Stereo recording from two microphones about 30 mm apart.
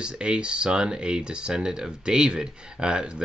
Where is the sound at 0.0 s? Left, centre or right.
Right.